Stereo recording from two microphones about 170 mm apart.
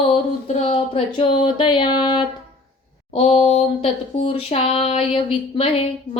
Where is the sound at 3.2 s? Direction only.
35° left (ahead or behind).